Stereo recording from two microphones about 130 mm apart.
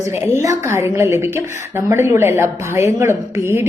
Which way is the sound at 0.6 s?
20° right (ahead or behind).